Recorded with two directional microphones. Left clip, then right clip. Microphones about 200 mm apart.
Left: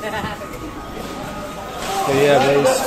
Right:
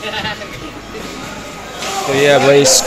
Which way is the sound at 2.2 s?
20° right (ahead or behind).